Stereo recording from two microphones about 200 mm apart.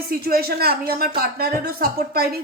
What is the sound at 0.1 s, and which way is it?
Speech, 50° right (ahead or behind).